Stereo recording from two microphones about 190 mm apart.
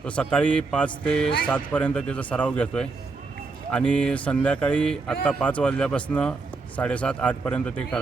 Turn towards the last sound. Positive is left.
turn(degrees=5)  # may be behind; listen again after turning